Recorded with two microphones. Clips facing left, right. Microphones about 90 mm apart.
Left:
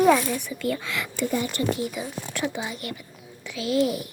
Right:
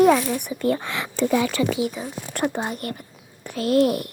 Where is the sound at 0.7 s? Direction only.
55° right (ahead or behind).